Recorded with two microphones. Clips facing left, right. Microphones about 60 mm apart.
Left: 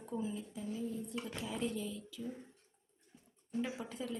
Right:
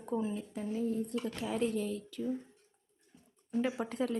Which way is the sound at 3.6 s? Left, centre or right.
Right.